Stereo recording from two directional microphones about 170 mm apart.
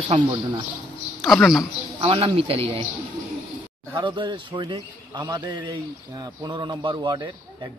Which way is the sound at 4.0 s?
30° right (ahead or behind).